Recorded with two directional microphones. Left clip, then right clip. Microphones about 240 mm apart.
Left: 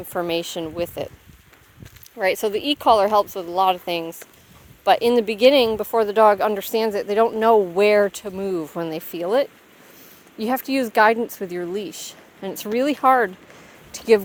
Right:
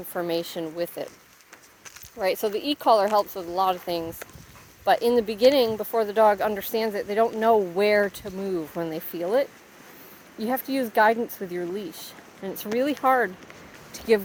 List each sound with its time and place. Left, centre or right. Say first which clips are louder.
0.1 s speech: left 4 dB; left
2.1 s speech: left 4 dB; left